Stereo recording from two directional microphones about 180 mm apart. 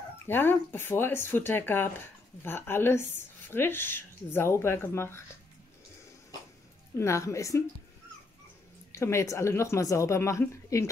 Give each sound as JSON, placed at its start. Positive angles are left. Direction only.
{"t": 0.3, "sound": "a woman's voice", "side_deg": 10}
{"t": 7.0, "sound": "a woman's voice", "side_deg": 15}
{"t": 8.9, "sound": "a woman's voice", "side_deg": 15}